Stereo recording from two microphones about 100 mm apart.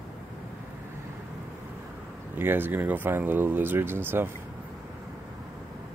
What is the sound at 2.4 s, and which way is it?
Speech, 20° right (ahead or behind).